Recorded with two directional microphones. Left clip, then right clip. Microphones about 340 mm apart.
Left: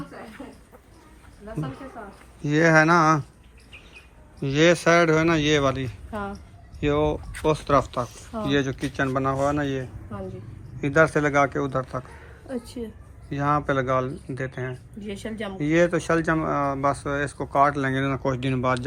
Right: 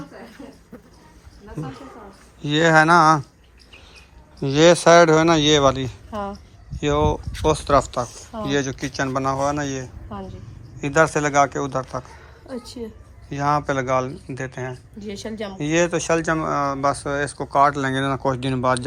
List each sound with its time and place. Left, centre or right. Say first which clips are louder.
2.4 s speech: right 3 dB; centre
4.4 s speech: right 5 dB; centre
6.1 s music: right 3 dB; right
6.7 s speech: right 3 dB; centre
13.3 s speech: right 2 dB; centre
15.0 s speech: right 2 dB; centre